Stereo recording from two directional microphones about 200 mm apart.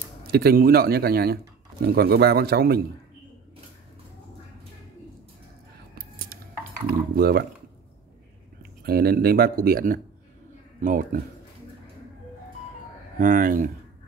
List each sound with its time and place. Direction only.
0.3 s speech: 50° right (ahead or behind)
5.9 s a sound: 50° right (ahead or behind)
6.9 s speech: 50° right (ahead or behind)
8.8 s speech: 50° right (ahead or behind)
13.2 s speech: 40° right (ahead or behind)